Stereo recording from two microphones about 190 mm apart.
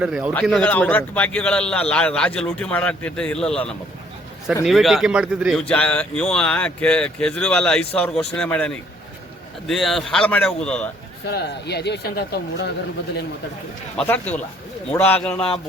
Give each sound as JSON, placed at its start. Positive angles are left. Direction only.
{"t": 0.0, "sound": "speech", "side_deg": -5}
{"t": 11.3, "sound": "speech", "side_deg": 60}
{"t": 14.1, "sound": "a man's voice", "side_deg": 10}